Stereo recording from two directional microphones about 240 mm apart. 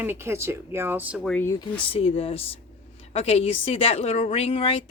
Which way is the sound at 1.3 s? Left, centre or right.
Centre.